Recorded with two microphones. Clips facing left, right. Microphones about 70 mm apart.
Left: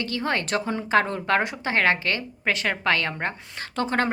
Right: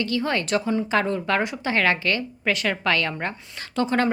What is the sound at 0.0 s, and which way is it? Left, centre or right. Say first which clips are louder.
Speech: right 2 dB; left.